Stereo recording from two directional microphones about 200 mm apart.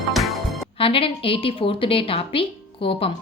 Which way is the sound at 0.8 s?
25° left (ahead or behind).